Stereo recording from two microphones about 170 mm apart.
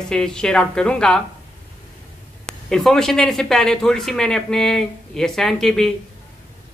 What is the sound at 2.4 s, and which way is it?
Speech, 5° left (ahead or behind).